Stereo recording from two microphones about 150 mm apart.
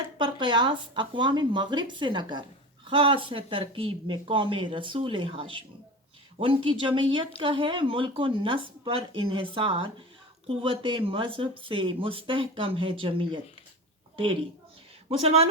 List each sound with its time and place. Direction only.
0.2 s speech: 30° right (ahead or behind)
15.2 s speech: 45° right (ahead or behind)